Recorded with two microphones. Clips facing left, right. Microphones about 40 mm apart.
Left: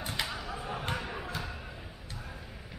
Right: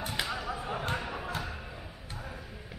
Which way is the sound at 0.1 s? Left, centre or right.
Right.